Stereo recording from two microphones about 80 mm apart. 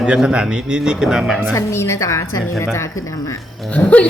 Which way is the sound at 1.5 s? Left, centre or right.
Left.